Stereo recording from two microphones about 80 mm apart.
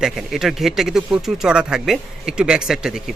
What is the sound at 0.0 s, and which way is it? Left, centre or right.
Speech, centre.